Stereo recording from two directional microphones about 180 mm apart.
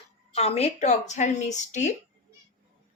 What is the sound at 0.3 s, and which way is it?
Speech, 35° left (ahead or behind).